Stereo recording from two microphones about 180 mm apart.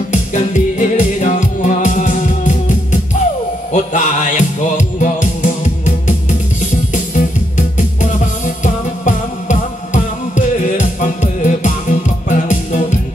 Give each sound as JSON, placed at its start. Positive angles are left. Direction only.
{"t": 0.1, "sound": "music", "side_deg": 45}
{"t": 7.5, "sound": "music", "side_deg": 45}